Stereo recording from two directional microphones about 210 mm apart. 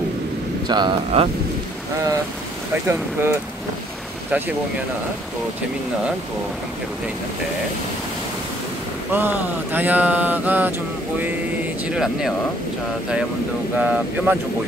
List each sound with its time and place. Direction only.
0.7 s speech: 20° right (ahead or behind)
2.9 s speech: 10° right (ahead or behind)
9.1 s speech: 10° right (ahead or behind)
11.9 s speech: centre (ahead or behind)
13.7 s speech: 5° right (ahead or behind)